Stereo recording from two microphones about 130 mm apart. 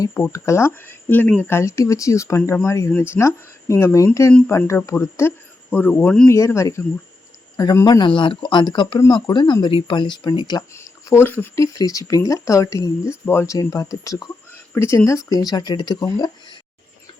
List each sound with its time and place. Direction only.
0.1 s speech: 20° left (ahead or behind)
4.3 s speech: 10° left (ahead or behind)
4.5 s speech: 20° left (ahead or behind)
6.3 s speech: 20° left (ahead or behind)
10.8 s speech: 20° left (ahead or behind)